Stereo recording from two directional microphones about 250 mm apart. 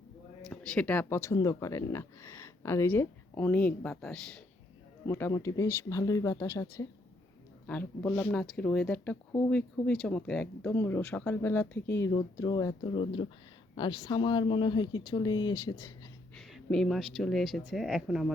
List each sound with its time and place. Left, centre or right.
0.5 s speech: centre
16.3 s a woman's voice: centre